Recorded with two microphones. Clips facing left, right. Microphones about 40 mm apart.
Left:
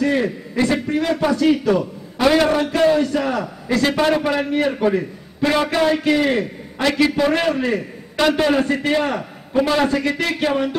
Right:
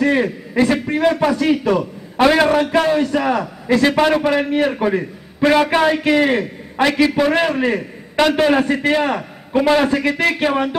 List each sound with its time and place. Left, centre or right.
0.0 s a man's voice: centre
2.2 s a man's voice: right
6.9 s a man's voice: centre
9.5 s a man's voice: right
9.8 s a man's voice: centre